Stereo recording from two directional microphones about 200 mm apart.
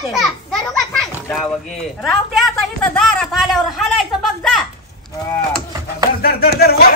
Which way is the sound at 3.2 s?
Centre (ahead or behind).